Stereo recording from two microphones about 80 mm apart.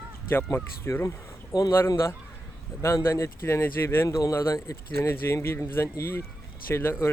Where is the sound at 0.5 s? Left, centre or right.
Left.